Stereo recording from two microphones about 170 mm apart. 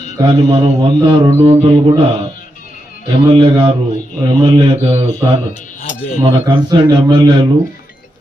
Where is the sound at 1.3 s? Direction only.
20° right (ahead or behind).